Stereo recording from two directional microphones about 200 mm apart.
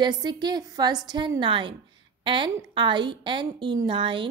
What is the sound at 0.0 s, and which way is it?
A woman's voice, 20° right (ahead or behind).